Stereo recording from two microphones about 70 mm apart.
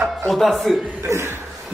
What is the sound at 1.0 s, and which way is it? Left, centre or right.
Speech, right.